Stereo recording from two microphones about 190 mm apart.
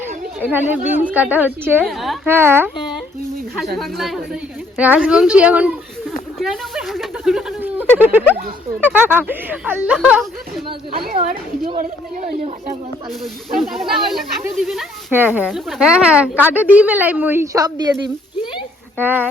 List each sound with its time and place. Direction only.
0.3 s speech: 10° right (ahead or behind)
1.8 s speech: centre (ahead or behind)
2.2 s speech: 10° right (ahead or behind)
3.8 s speech: centre (ahead or behind)
11.0 s speech: 50° right (ahead or behind)
11.8 s speech: 40° right (ahead or behind)
13.6 s speech: centre (ahead or behind); by 18.1 s 20° right (ahead or behind)
19.0 s speech: 10° right (ahead or behind)